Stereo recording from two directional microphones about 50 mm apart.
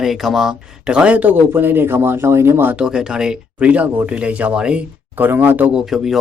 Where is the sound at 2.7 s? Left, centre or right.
Centre.